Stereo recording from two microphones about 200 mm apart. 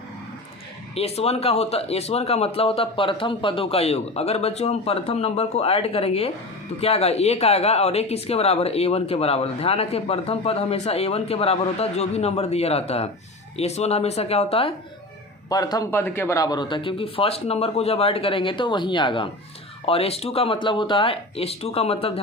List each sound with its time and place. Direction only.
0.9 s speech: 30° left (ahead or behind)
15.4 s speech: 20° left (ahead or behind)